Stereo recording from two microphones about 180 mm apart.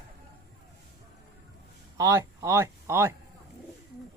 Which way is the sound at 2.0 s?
15° right (ahead or behind).